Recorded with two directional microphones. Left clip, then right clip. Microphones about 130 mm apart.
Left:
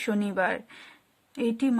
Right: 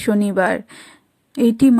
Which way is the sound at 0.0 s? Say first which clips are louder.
Right 9 dB; 35° right (ahead or behind).